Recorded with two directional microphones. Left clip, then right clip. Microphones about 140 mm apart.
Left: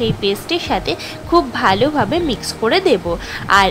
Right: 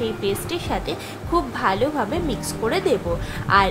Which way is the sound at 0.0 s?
40° left (ahead or behind).